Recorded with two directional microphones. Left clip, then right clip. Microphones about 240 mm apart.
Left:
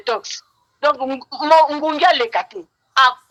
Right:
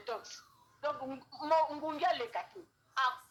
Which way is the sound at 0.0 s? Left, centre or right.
Left.